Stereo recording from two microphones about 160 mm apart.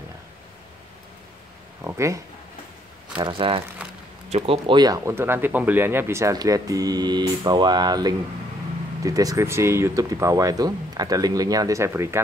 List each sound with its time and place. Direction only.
1.9 s speech: 20° right (ahead or behind)
3.2 s speech: 30° right (ahead or behind); by 12.2 s 15° right (ahead or behind)